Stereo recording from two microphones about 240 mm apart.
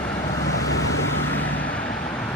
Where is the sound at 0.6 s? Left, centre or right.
Left.